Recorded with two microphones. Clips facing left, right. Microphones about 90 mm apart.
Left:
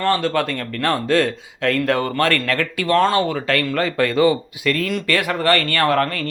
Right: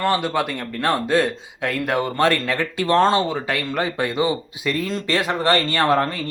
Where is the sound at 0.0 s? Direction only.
15° right (ahead or behind).